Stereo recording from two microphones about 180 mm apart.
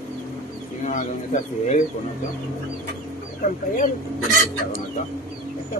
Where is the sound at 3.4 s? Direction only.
50° left (ahead or behind).